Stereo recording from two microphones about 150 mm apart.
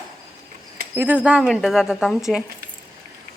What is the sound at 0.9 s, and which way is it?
A woman's voice, 10° right (ahead or behind).